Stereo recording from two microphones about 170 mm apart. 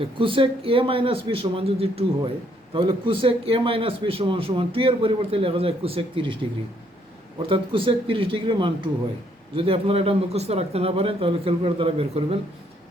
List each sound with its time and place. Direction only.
0.0 s a man's voice: 30° right (ahead or behind)
7.4 s a man's voice: 30° right (ahead or behind)